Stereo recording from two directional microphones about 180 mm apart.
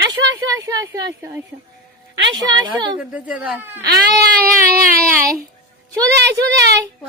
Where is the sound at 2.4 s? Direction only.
25° right (ahead or behind).